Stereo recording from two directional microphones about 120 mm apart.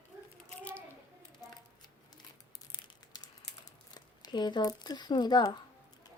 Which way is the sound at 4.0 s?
35° left (ahead or behind).